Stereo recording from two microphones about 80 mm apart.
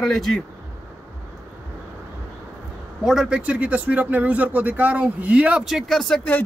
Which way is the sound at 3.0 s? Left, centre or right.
Centre.